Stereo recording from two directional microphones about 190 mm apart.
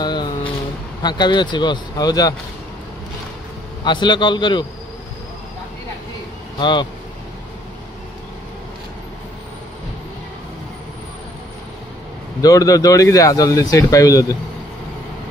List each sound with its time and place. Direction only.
0.0 s a sound: 20° left (ahead or behind)
1.0 s speech: 25° left (ahead or behind)
3.8 s speech: 25° left (ahead or behind)
6.6 s speech: 25° left (ahead or behind)
12.4 s speech: 20° left (ahead or behind)